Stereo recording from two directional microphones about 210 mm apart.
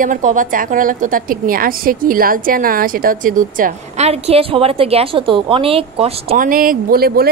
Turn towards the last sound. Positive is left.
turn(degrees=-45)  # may be behind; listen again after turning